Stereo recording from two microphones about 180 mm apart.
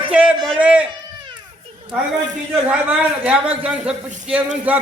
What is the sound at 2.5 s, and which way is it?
A man's voice, 5° right (ahead or behind).